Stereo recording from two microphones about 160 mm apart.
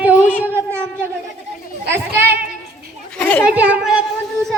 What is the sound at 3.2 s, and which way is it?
Speech, 10° left (ahead or behind).